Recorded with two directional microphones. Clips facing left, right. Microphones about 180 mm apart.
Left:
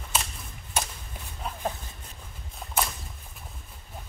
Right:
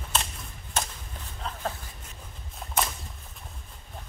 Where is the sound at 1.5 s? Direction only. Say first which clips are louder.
Left 1 dB; 10° left (ahead or behind).